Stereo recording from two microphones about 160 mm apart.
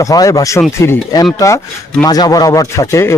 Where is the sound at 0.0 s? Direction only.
20° left (ahead or behind).